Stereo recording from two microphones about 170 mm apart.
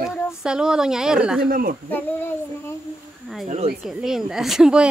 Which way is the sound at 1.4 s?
60° right (ahead or behind).